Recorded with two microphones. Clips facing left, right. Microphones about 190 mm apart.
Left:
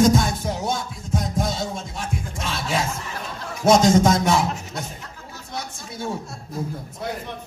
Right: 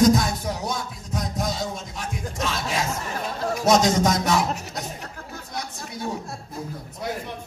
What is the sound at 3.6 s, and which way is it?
Speech, 30° left (ahead or behind).